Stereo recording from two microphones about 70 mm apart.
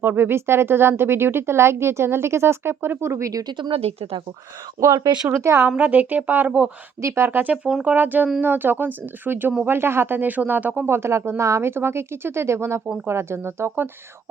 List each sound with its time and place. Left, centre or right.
0.0 s speech: right
4.9 s speech: right
5.3 s speech: right
5.6 s speech: right